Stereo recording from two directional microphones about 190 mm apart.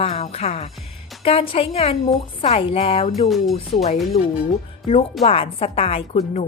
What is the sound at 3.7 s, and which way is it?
Speech, 35° left (ahead or behind).